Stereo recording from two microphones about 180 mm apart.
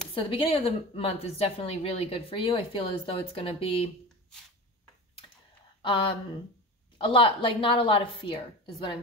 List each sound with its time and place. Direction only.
0.1 s a woman's voice: 30° left (ahead or behind)
5.8 s a woman's voice: 30° left (ahead or behind)